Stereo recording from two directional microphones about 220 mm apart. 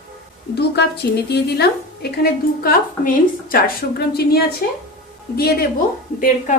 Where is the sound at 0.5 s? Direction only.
50° left (ahead or behind).